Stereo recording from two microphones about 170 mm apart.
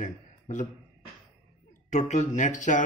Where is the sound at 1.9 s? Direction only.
45° left (ahead or behind).